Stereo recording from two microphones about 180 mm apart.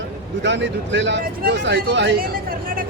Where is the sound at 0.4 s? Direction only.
80° right.